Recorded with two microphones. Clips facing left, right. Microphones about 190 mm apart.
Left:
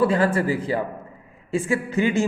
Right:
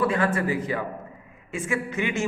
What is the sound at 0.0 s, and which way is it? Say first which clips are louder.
A man's voice: left 4 dB; 30° left (ahead or behind).